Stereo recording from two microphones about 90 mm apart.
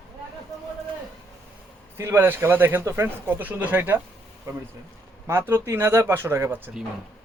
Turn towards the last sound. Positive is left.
turn(degrees=-25)  # may be behind; listen again after turning